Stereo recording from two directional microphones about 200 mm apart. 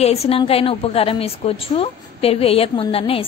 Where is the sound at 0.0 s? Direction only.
30° left (ahead or behind).